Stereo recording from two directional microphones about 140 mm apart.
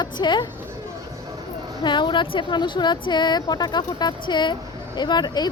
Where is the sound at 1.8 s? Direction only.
35° left (ahead or behind).